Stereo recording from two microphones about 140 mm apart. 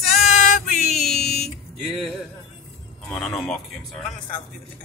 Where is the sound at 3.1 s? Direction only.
5° left (ahead or behind).